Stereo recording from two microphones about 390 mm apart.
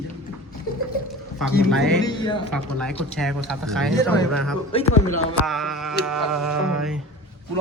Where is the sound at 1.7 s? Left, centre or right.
Centre.